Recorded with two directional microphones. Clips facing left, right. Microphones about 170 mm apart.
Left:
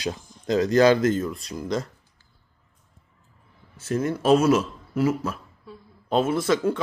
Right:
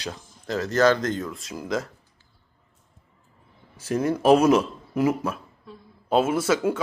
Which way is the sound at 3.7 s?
15° right (ahead or behind).